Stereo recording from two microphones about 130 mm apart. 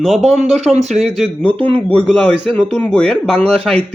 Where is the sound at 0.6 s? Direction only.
55° right (ahead or behind).